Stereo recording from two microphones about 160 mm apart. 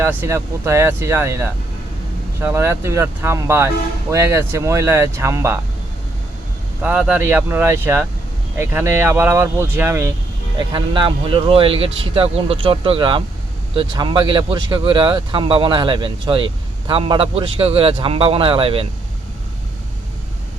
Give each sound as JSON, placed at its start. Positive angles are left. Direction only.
{"t": 0.0, "sound": "speech", "side_deg": -15}
{"t": 6.8, "sound": "speech", "side_deg": -10}
{"t": 10.6, "sound": "speech", "side_deg": -30}